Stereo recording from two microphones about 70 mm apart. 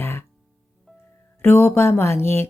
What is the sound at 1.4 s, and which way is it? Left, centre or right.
Speech, left.